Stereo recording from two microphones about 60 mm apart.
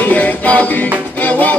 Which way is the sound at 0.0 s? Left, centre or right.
Left.